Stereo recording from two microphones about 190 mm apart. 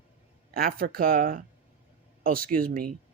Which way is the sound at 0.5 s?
50° right (ahead or behind).